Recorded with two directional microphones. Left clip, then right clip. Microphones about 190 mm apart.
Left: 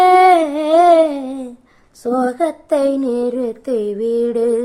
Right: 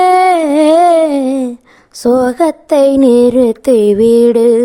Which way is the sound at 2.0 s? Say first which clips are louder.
Right 7 dB; 55° right (ahead or behind).